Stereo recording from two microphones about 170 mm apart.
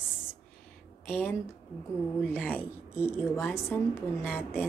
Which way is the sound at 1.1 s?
10° left (ahead or behind).